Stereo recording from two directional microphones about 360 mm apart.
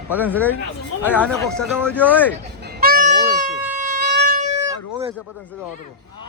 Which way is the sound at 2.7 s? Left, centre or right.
Right.